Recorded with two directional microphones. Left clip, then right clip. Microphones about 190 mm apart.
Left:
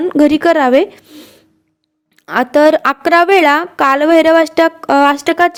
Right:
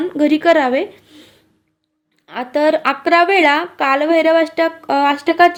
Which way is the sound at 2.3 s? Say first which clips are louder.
Left 6 dB; 45° left (ahead or behind).